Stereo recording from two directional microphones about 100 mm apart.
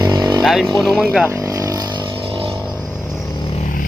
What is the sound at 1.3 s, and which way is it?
Vehicle, 30° right (ahead or behind).